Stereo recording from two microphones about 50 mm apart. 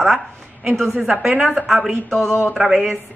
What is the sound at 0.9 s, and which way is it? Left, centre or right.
Speech, centre.